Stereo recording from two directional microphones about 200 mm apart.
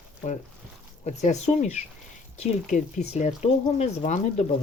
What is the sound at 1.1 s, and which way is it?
Speech, 35° left (ahead or behind).